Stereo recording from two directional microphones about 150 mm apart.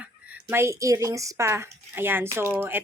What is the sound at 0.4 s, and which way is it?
Speech, 15° right (ahead or behind).